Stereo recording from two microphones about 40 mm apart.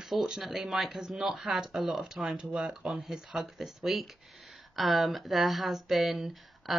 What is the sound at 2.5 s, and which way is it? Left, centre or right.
Speech, right.